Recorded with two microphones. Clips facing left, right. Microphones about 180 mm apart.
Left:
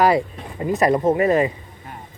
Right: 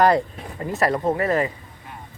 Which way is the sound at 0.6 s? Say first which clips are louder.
Left 4 dB; 20° left (ahead or behind).